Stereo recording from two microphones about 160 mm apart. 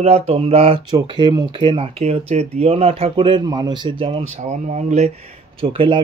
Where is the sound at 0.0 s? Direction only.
40° right (ahead or behind).